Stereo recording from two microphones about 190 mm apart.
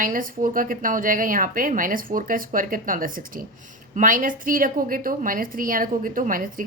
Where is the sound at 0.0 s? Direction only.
45° right (ahead or behind).